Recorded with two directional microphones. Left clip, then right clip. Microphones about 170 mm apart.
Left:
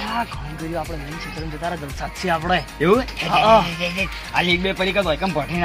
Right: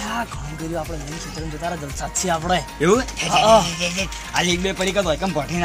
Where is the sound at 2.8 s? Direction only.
15° left (ahead or behind).